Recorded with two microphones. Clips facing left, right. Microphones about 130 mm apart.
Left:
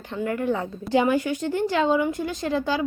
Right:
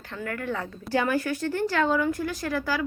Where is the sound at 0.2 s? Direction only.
20° left (ahead or behind).